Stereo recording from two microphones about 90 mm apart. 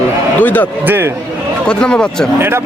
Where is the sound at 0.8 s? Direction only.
25° right (ahead or behind).